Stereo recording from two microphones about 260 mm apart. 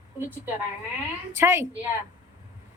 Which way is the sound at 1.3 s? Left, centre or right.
Centre.